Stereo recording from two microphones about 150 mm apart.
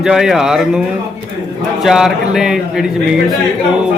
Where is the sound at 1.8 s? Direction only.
5° right (ahead or behind).